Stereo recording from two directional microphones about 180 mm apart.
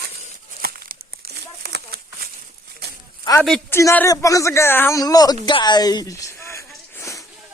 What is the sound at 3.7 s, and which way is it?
Speech, 15° left (ahead or behind).